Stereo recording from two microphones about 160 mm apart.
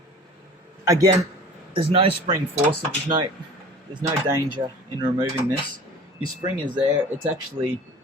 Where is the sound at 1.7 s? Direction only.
35° right (ahead or behind).